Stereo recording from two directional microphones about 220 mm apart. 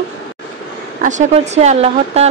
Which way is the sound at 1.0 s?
35° right (ahead or behind).